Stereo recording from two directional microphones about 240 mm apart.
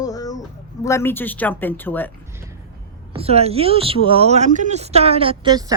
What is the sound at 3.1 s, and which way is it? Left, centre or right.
Speech, right.